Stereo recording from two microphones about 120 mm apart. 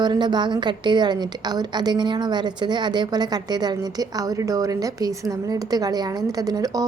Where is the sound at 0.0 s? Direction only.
35° right (ahead or behind).